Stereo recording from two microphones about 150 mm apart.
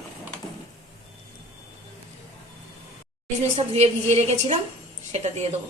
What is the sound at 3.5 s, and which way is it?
A woman's voice, 45° right (ahead or behind).